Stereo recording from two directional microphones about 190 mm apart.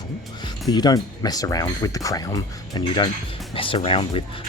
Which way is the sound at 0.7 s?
20° left (ahead or behind).